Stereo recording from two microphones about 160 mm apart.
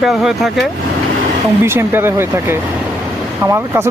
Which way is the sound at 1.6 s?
15° right (ahead or behind).